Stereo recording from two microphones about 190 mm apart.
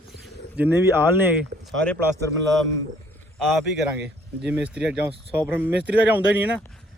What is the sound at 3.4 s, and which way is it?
Speech, centre (ahead or behind).